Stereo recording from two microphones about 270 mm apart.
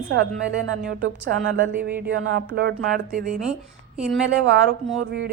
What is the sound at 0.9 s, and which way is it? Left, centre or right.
A woman's voice, right.